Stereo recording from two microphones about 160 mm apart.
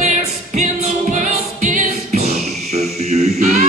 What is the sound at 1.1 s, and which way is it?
Music, 50° right (ahead or behind).